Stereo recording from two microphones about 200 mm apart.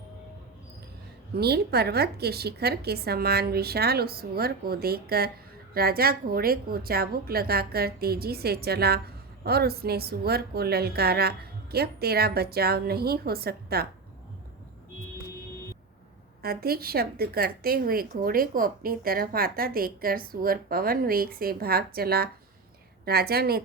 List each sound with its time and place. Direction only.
1.4 s a woman's voice: 50° right (ahead or behind)
16.4 s a woman's voice: 50° right (ahead or behind)